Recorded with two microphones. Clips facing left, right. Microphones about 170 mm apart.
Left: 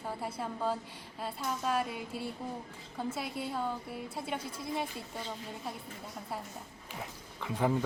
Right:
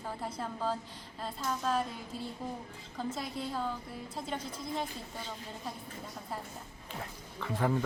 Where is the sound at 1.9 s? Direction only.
65° left (ahead or behind).